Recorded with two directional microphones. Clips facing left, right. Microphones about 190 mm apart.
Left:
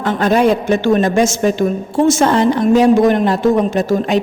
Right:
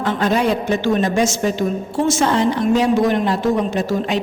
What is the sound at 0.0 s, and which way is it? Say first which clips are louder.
A woman's voice: left 4 dB; 50° left (ahead or behind).